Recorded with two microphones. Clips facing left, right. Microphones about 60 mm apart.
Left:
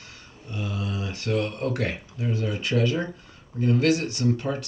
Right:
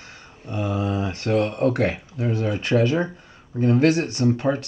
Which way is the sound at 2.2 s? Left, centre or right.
Right.